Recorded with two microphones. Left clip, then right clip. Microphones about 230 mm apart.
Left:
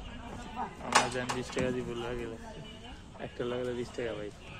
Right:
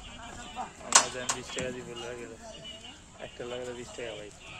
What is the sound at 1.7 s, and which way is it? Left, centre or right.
Speech, left.